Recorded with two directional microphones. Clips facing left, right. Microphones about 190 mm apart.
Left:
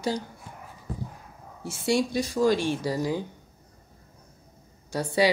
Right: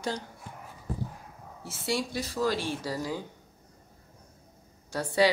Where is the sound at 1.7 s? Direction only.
15° left (ahead or behind).